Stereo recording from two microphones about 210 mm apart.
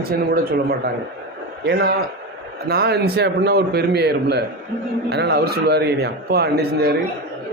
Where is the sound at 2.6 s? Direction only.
50° right (ahead or behind).